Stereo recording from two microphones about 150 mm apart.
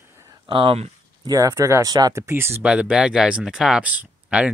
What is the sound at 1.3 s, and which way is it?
Speech, 20° right (ahead or behind).